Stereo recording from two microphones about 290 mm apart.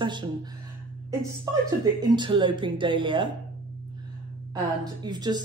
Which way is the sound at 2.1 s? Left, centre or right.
Centre.